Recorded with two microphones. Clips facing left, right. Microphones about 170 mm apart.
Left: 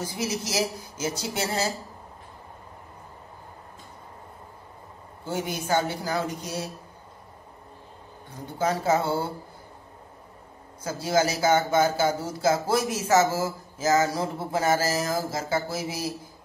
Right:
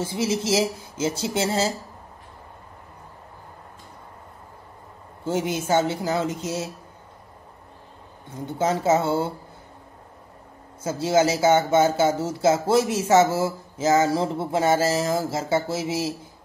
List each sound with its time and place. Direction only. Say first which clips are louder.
0.0 s speech: right 5 dB; 25° right (ahead or behind)
5.2 s speech: right 5 dB; 25° right (ahead or behind)
8.5 s speech: right 3 dB; 25° right (ahead or behind)
10.8 s speech: right 4 dB; 25° right (ahead or behind)